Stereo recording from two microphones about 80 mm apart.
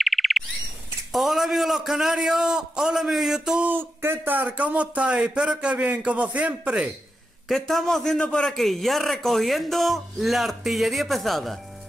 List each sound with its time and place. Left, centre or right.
0.0 s bird: centre
1.1 s a man's voice: centre
3.6 s speech: right
7.4 s a man's voice: centre